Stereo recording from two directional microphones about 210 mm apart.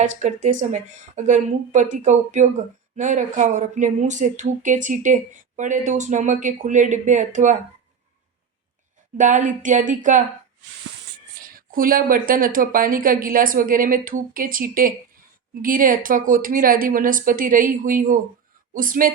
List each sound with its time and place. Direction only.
0.0 s speech: 35° right (ahead or behind)
9.1 s speech: 35° right (ahead or behind)
11.3 s speech: 40° right (ahead or behind)